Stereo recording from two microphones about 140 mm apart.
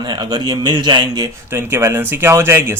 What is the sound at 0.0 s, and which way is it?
Speech, 30° right (ahead or behind).